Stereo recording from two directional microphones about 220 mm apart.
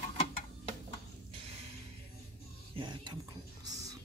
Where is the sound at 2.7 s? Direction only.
20° right (ahead or behind).